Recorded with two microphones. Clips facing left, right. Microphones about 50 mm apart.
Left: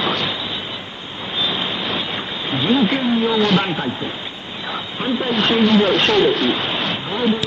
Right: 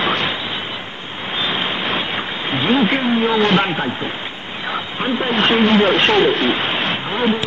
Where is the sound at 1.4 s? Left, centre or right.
Right.